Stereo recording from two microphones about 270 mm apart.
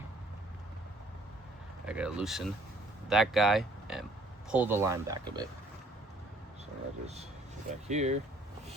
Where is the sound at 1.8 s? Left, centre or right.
Centre.